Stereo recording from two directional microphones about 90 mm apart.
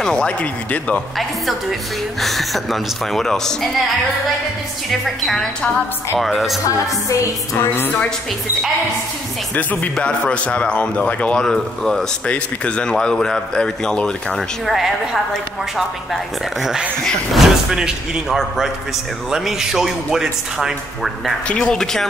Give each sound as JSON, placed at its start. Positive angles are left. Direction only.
{"t": 0.0, "sound": "speech", "side_deg": 10}
{"t": 1.1, "sound": "a man's voice", "side_deg": 0}
{"t": 5.0, "sound": "a man's voice", "side_deg": 0}
{"t": 7.5, "sound": "a woman's voice", "side_deg": 25}
{"t": 9.6, "sound": "speech", "side_deg": 20}
{"t": 16.6, "sound": "a man's voice", "side_deg": -5}
{"t": 21.5, "sound": "speech", "side_deg": 10}